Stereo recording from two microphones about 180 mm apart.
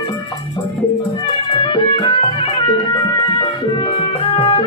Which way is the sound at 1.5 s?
25° left (ahead or behind).